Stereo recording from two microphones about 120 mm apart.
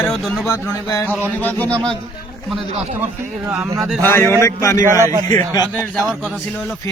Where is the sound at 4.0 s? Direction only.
20° left (ahead or behind).